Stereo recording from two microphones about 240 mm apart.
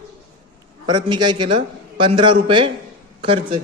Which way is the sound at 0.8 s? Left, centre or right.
Centre.